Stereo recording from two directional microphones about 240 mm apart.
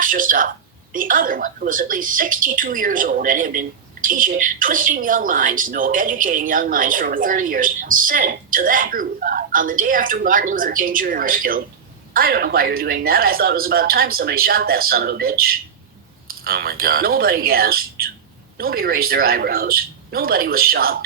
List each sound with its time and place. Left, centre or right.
0.0 s speech: right